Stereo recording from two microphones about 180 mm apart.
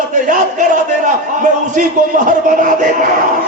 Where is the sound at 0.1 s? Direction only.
45° right (ahead or behind).